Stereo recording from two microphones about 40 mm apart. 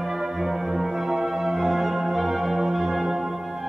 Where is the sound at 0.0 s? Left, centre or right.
Centre.